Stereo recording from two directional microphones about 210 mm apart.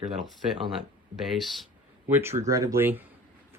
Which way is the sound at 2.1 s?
10° right (ahead or behind).